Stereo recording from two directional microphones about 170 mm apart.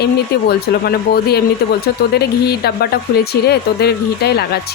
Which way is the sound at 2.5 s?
70° left (ahead or behind).